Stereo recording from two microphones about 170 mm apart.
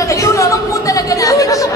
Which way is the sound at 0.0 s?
15° left (ahead or behind).